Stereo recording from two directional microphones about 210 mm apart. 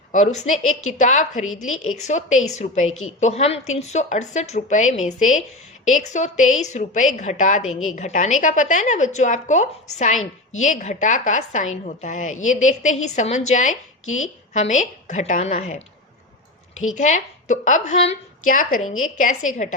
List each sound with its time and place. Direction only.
0.1 s speech: 35° left (ahead or behind)
1.5 s a woman's voice: 80° left
2.0 s speech: 35° left (ahead or behind)
7.7 s a woman's voice: 80° left
7.9 s speech: 35° left (ahead or behind)
14.0 s speech: 75° left (ahead or behind)
14.5 s speech: 35° left (ahead or behind)
17.0 s speech: 35° left (ahead or behind)